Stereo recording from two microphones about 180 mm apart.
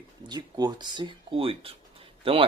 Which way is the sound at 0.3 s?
20° right (ahead or behind).